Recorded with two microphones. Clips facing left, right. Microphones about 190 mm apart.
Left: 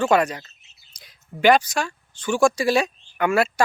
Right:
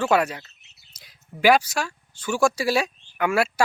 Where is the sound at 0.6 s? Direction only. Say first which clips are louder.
Even; 70° right (ahead or behind).